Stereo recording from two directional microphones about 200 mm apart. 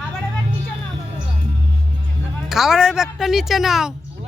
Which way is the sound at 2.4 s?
Centre (ahead or behind).